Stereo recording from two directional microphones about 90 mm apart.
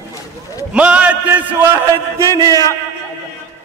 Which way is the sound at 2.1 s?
40° right (ahead or behind).